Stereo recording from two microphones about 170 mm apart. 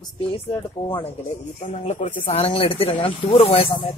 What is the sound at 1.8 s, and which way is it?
Speech, 40° left (ahead or behind).